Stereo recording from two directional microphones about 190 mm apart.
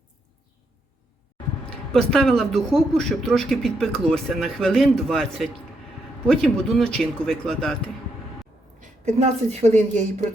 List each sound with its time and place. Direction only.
1.9 s speech: 5° left (ahead or behind)
8.8 s a woman's voice: 35° right (ahead or behind)